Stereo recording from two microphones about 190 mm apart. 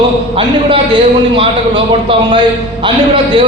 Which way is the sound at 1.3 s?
25° right (ahead or behind).